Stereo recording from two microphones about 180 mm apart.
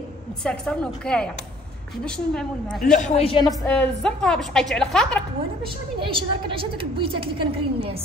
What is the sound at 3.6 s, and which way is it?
A woman's voice, 10° left (ahead or behind).